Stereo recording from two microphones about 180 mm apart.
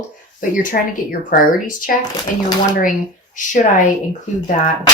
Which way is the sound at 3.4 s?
45° left (ahead or behind).